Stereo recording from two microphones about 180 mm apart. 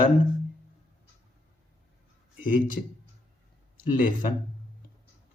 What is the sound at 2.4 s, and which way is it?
Speech, 50° left (ahead or behind).